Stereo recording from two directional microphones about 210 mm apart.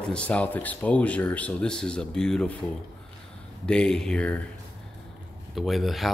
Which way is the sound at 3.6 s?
5° left (ahead or behind).